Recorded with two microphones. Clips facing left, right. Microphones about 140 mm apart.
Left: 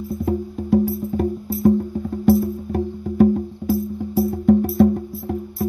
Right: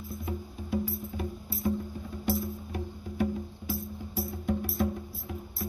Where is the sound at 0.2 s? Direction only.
65° left (ahead or behind).